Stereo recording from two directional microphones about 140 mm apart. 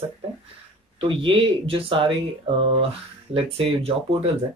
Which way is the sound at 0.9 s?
40° right (ahead or behind).